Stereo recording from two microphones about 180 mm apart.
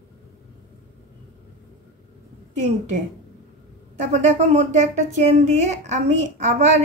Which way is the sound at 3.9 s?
40° right (ahead or behind).